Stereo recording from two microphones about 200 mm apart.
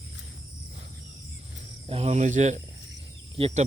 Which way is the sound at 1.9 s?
35° right (ahead or behind).